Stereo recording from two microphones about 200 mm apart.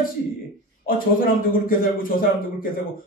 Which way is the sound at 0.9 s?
45° left (ahead or behind).